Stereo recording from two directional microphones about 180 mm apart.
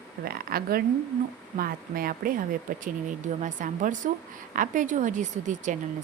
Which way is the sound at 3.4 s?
45° right (ahead or behind).